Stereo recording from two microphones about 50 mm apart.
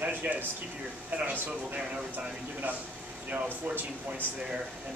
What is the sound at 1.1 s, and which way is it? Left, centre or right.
Speech, right.